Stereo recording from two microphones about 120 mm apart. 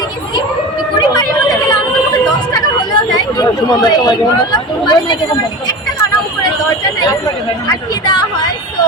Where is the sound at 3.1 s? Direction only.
35° left (ahead or behind).